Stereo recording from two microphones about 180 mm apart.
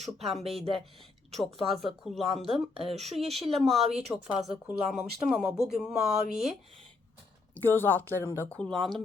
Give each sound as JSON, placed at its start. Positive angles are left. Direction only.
{"t": 0.4, "sound": "speech", "side_deg": -35}
{"t": 1.5, "sound": "speech", "side_deg": 0}
{"t": 7.5, "sound": "speech", "side_deg": 10}